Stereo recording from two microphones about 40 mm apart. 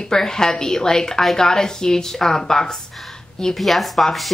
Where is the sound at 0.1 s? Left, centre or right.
Centre.